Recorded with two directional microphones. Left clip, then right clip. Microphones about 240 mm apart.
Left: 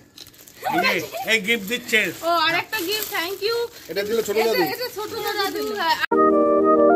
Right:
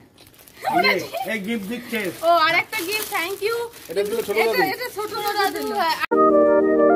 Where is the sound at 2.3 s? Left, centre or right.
Centre.